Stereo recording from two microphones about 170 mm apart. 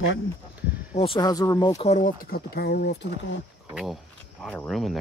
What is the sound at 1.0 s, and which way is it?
Speech, 30° left (ahead or behind).